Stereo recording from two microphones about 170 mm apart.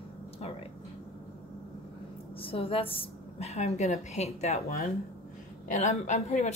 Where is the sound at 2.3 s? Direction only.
35° left (ahead or behind).